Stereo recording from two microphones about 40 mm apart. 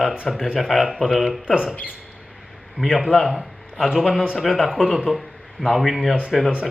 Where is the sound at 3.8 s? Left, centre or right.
Centre.